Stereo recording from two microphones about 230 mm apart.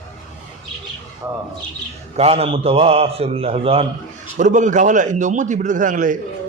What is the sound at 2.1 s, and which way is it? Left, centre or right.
A man's voice, right.